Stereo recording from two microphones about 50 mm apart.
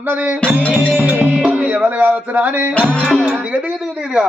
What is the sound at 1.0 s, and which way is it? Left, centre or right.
Music, right.